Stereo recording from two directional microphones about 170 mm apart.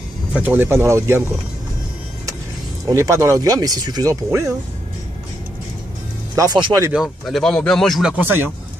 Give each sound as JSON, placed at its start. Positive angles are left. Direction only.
{"t": 0.3, "sound": "speech", "side_deg": -10}
{"t": 2.9, "sound": "speech", "side_deg": -20}
{"t": 6.3, "sound": "speech", "side_deg": -20}
{"t": 6.9, "sound": "speech", "side_deg": 0}